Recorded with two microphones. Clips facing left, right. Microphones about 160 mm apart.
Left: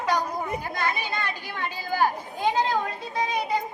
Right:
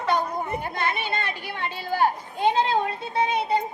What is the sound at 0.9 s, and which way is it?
Speech, 65° right (ahead or behind).